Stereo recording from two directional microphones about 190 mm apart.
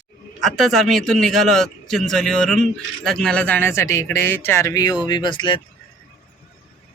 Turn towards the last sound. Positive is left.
turn(degrees=25)  # may be behind; listen again after turning